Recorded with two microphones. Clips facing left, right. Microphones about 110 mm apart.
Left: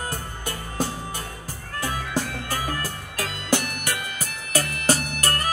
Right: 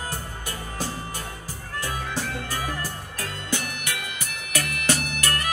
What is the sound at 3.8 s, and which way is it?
Music, 45° left (ahead or behind).